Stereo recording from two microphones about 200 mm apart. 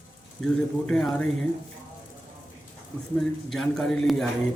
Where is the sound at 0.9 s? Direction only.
5° left (ahead or behind).